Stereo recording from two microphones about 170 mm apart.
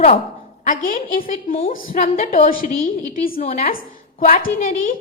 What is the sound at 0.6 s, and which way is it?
Speech, 55° left (ahead or behind).